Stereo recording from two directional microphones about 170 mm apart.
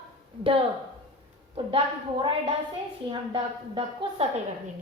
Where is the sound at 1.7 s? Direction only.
35° right (ahead or behind).